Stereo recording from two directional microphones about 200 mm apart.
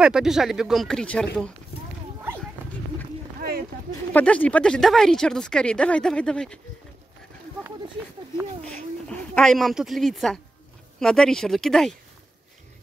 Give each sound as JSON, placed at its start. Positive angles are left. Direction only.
{"t": 0.0, "sound": "speech", "side_deg": -5}
{"t": 3.3, "sound": "a sound", "side_deg": -50}
{"t": 4.1, "sound": "speech", "side_deg": 5}
{"t": 8.6, "sound": "speech", "side_deg": 5}